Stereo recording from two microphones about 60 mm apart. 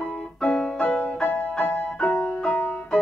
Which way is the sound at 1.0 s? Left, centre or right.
Left.